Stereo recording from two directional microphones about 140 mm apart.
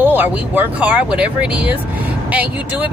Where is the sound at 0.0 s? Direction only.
15° right (ahead or behind).